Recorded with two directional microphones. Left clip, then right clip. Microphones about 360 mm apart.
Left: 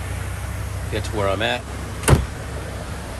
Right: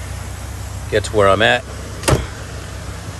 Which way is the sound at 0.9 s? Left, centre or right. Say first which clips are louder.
Right 10 dB; right.